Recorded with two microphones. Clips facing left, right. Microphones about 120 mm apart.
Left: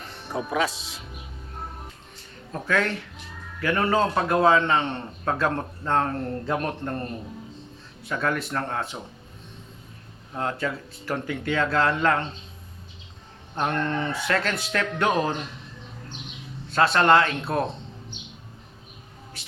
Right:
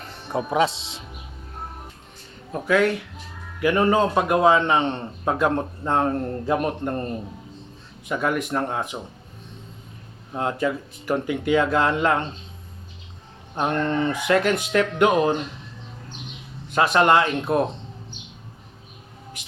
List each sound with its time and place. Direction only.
0.3 s speech: 20° right (ahead or behind)
2.5 s a man's voice: 10° right (ahead or behind)
8.0 s a man's voice: 15° right (ahead or behind)
10.3 s a man's voice: 15° right (ahead or behind)
13.6 s a man's voice: 15° right (ahead or behind)
16.6 s a man's voice: 15° right (ahead or behind)